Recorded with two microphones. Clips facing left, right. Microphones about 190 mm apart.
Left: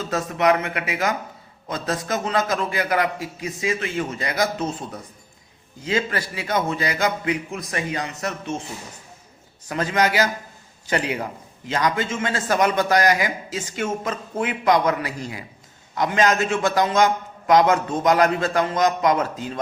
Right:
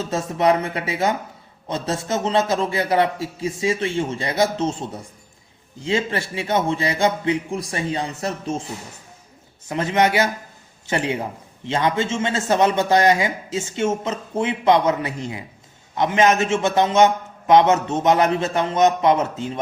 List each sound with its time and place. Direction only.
0.0 s a man's voice: 25° right (ahead or behind)
9.6 s a man's voice: 25° right (ahead or behind)